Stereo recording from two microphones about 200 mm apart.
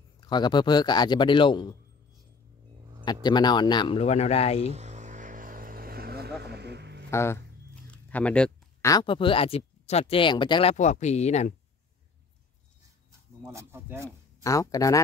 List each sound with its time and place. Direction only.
0.2 s speech: 20° left (ahead or behind)
3.1 s speech: 20° left (ahead or behind)
4.6 s vehicle: 35° right (ahead or behind); by 7.1 s 55° right (ahead or behind)
7.1 s speech: 15° left (ahead or behind)
7.9 s a sound: 5° left (ahead or behind)
8.9 s speech: 25° left (ahead or behind)
13.5 s speech: 15° right (ahead or behind)
14.4 s speech: 15° left (ahead or behind)